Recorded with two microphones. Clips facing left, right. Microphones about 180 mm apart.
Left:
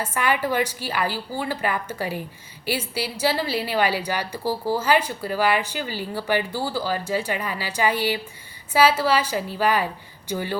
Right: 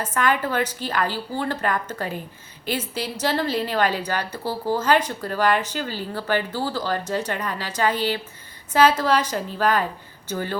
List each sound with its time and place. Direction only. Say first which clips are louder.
0.0 s a woman's voice: right 1 dB; 10° left (ahead or behind)